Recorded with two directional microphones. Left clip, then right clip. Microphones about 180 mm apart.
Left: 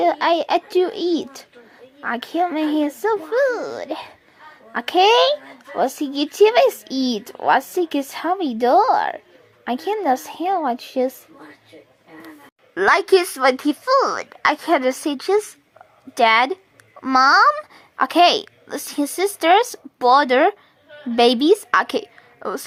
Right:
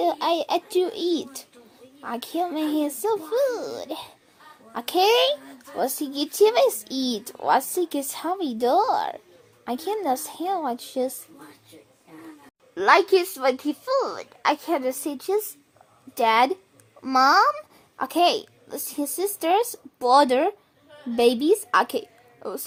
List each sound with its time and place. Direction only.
0.0 s a child's voice: 15° left (ahead or behind)
12.7 s a child's voice: 25° left (ahead or behind)